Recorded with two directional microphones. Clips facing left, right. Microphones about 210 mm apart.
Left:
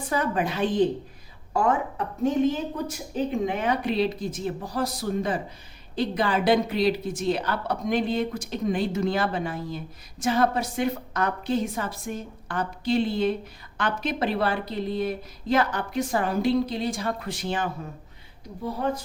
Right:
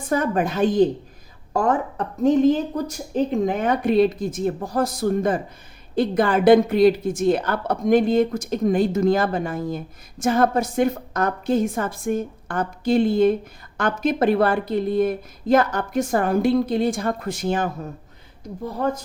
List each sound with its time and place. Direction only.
0.1 s a woman's voice: 45° right (ahead or behind)